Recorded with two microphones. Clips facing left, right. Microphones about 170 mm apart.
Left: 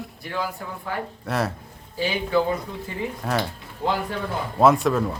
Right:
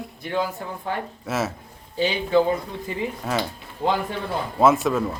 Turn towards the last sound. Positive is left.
turn(degrees=0)  # may be behind; listen again after turning